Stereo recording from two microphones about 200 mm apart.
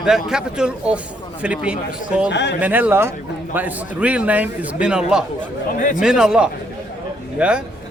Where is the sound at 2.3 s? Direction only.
60° left (ahead or behind).